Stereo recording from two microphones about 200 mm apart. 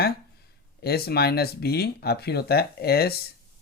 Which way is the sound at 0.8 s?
50° left (ahead or behind).